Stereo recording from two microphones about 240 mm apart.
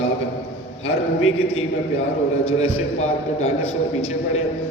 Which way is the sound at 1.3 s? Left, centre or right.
Left.